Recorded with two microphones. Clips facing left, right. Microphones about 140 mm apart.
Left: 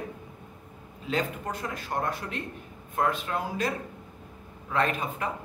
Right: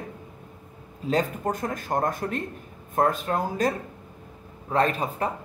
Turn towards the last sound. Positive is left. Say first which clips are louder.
# right 4 dB
turn(degrees=-35)  # may be behind; listen again after turning